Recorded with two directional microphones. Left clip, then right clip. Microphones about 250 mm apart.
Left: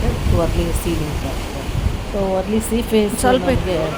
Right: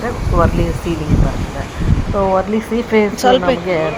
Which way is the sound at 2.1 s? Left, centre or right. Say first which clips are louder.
Right 5 dB; centre.